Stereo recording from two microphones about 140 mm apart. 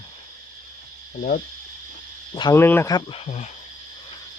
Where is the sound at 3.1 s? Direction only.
50° left (ahead or behind).